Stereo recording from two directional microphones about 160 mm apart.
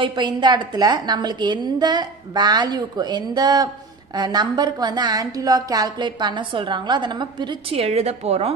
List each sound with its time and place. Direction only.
0.0 s a woman's voice: 30° right (ahead or behind)